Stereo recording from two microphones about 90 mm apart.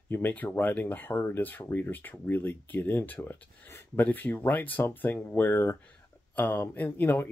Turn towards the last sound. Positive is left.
turn(degrees=25)  # may be behind; listen again after turning